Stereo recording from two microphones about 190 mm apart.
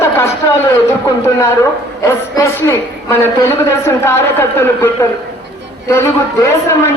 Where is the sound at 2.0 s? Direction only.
15° left (ahead or behind).